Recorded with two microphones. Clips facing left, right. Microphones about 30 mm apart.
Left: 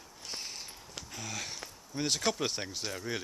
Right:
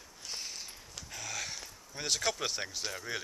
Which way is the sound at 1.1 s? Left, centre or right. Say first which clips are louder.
Right 1 dB; centre.